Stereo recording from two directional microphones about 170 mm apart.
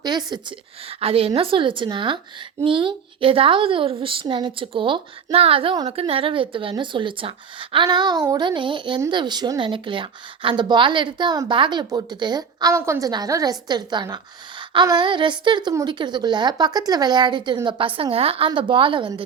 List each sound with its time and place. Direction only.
0.0 s a woman's voice: 25° right (ahead or behind)